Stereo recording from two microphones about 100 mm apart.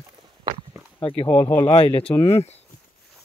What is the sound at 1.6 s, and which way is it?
Speech, 45° left (ahead or behind).